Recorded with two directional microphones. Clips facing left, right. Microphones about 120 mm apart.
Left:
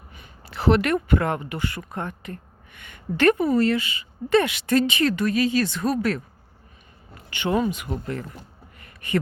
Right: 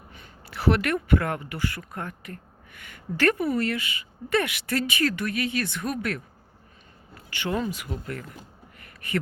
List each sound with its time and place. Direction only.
0.4 s speech: 25° left (ahead or behind)
7.3 s speech: 20° left (ahead or behind)
8.8 s a sound: 25° left (ahead or behind)